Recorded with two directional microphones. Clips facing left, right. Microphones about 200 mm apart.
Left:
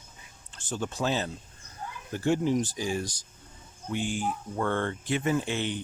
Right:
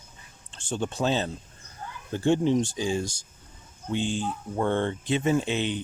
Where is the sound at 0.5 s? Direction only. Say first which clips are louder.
Right 3 dB; 25° right (ahead or behind).